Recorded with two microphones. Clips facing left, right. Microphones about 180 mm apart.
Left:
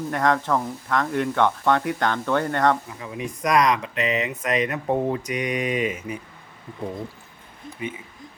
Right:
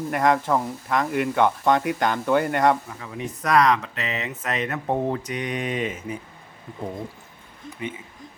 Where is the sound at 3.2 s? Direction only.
15° left (ahead or behind).